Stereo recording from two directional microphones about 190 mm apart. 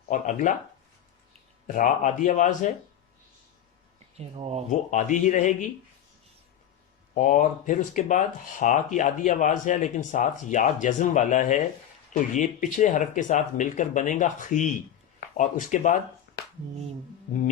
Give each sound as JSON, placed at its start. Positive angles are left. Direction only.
{"t": 0.1, "sound": "speech", "side_deg": 45}
{"t": 1.6, "sound": "speech", "side_deg": 45}
{"t": 4.2, "sound": "speech", "side_deg": -35}
{"t": 4.7, "sound": "speech", "side_deg": 40}
{"t": 7.1, "sound": "speech", "side_deg": 45}
{"t": 16.3, "sound": "a sound", "side_deg": 55}